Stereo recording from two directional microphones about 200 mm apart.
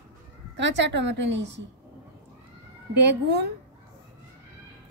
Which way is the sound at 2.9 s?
55° right (ahead or behind).